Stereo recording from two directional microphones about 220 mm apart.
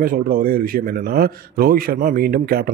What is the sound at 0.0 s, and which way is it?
A man's voice, 40° right (ahead or behind).